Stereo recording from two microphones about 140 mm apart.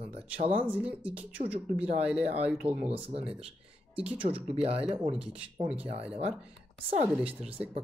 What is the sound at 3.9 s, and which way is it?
Speech, 10° right (ahead or behind).